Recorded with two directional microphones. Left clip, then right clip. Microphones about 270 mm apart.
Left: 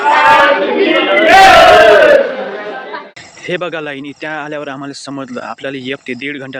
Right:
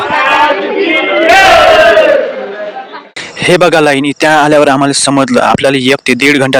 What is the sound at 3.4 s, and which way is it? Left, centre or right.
Speech, right.